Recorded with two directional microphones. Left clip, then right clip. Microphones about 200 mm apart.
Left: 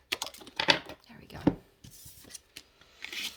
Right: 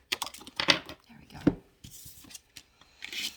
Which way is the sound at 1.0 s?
45° left (ahead or behind).